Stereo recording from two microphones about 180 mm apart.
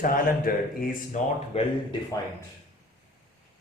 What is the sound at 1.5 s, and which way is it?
Speech, 35° left (ahead or behind).